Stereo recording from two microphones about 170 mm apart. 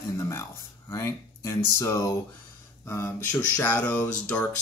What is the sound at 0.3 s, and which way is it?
Speech, 15° left (ahead or behind).